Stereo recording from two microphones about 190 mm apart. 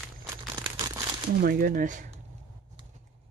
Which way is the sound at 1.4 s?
50° right (ahead or behind).